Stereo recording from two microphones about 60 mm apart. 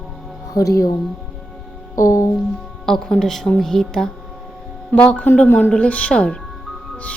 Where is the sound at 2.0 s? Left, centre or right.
Left.